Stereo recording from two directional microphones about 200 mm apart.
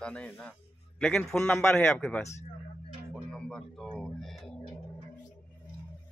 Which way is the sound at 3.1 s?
5° left (ahead or behind).